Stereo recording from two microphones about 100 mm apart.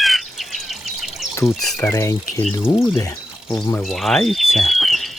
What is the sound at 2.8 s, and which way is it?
Speech, 40° left (ahead or behind).